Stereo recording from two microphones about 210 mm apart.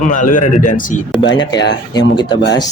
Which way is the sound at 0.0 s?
40° left (ahead or behind).